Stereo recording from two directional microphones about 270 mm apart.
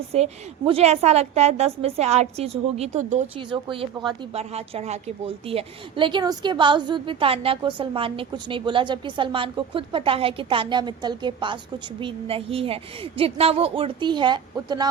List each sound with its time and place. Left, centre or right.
0.1 s a woman's voice: right